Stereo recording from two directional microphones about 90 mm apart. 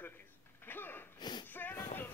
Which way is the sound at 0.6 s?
25° left (ahead or behind).